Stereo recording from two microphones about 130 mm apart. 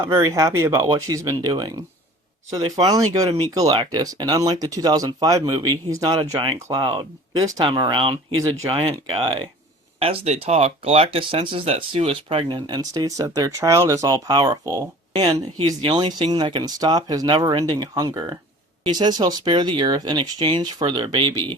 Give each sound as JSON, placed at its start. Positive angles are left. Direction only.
{"t": 0.0, "sound": "speech", "side_deg": -20}
{"t": 6.1, "sound": "speech", "side_deg": -45}
{"t": 14.3, "sound": "speech", "side_deg": -35}